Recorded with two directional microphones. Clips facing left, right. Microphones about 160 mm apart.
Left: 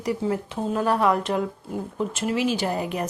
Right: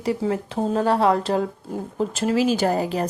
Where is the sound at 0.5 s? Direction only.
35° right (ahead or behind).